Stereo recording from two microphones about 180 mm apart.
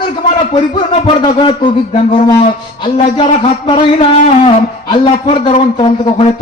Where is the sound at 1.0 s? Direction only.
30° left (ahead or behind).